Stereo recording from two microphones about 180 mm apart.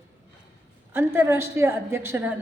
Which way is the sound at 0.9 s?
10° right (ahead or behind).